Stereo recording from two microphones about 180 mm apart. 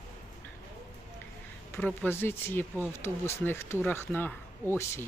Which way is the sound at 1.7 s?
5° left (ahead or behind).